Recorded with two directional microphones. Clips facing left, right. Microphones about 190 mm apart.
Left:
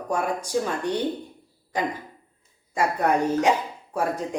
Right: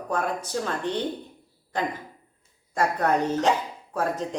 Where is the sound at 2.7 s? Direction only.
10° left (ahead or behind).